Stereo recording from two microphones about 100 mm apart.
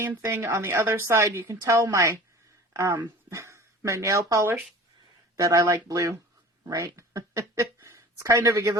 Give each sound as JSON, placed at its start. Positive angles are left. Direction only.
{"t": 0.0, "sound": "a woman's voice", "side_deg": -25}
{"t": 6.7, "sound": "a sound", "side_deg": -30}
{"t": 8.4, "sound": "speech", "side_deg": -35}